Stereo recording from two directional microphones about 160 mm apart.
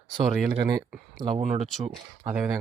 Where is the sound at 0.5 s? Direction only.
30° right (ahead or behind).